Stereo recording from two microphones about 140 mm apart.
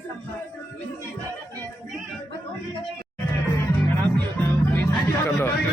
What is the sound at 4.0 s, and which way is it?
Music, 10° left (ahead or behind).